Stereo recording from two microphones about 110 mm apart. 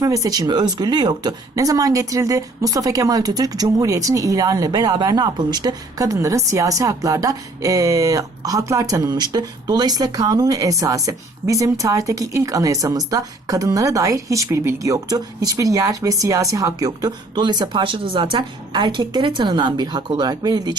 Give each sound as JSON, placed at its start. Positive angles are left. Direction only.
{"t": 0.0, "sound": "speech", "side_deg": -35}